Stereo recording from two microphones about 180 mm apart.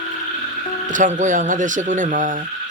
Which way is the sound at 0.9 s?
45° right (ahead or behind).